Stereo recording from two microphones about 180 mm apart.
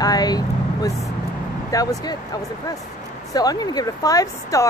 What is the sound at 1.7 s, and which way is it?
Speech, 20° left (ahead or behind).